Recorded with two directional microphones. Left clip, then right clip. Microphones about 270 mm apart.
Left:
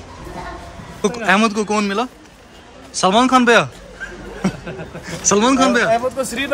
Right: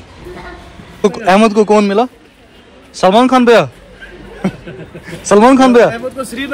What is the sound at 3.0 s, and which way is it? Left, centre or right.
Speech, centre.